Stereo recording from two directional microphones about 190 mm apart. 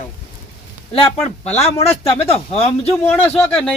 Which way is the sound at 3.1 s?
10° left (ahead or behind).